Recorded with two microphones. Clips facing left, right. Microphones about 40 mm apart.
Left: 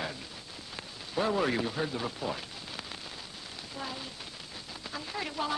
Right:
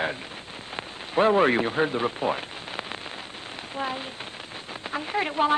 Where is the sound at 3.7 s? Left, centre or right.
Right.